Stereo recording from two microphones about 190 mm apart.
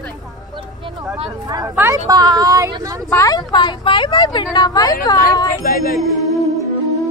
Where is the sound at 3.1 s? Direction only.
20° left (ahead or behind).